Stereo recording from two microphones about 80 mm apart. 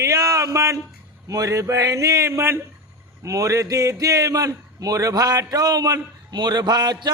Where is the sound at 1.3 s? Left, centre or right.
Right.